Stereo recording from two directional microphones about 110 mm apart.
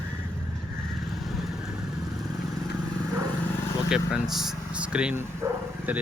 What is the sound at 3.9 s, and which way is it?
Speech, 5° right (ahead or behind).